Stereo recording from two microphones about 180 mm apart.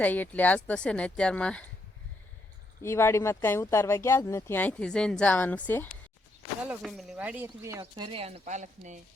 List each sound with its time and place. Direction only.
0.0 s speech: 10° left (ahead or behind)
2.8 s speech: 15° left (ahead or behind)
6.7 s speech: centre (ahead or behind); by 9.0 s 40° right (ahead or behind)